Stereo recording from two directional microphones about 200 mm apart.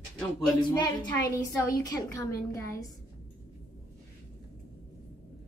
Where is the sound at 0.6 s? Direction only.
20° left (ahead or behind).